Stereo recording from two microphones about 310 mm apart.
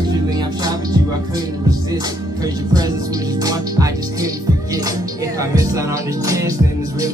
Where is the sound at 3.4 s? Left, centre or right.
Centre.